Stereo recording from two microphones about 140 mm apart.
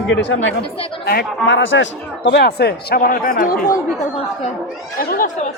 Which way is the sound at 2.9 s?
90° left.